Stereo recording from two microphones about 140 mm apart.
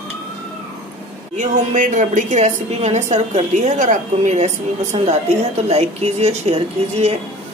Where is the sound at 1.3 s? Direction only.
65° right (ahead or behind).